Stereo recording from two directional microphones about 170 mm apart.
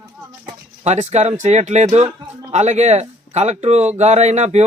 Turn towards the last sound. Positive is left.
turn(degrees=-40)  # may be behind; listen again after turning